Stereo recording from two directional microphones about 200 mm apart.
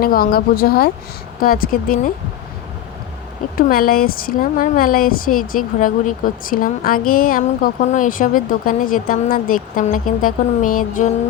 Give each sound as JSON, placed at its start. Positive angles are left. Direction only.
{"t": 0.0, "sound": "a woman's voice", "side_deg": 45}
{"t": 3.7, "sound": "a woman's voice", "side_deg": 45}